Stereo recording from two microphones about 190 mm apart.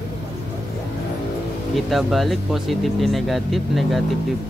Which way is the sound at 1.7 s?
Centre (ahead or behind).